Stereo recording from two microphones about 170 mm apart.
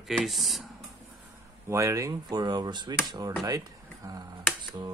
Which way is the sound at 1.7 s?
15° right (ahead or behind).